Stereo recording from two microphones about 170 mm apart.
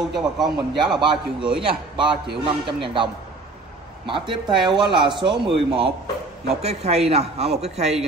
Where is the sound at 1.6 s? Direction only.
30° right (ahead or behind).